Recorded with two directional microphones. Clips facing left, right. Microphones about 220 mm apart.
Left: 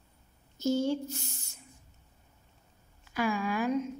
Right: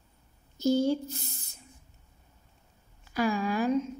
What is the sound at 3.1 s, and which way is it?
Speech, 35° right (ahead or behind).